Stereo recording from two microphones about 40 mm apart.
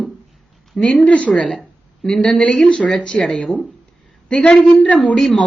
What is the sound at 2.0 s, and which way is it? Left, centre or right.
Speech, centre.